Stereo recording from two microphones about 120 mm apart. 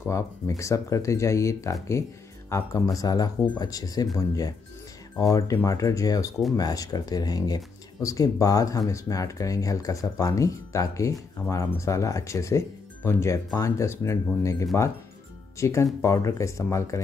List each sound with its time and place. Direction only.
0.1 s speech: 25° left (ahead or behind)
5.2 s speech: 25° left (ahead or behind)